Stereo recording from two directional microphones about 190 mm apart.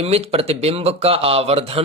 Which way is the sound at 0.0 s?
30° right (ahead or behind).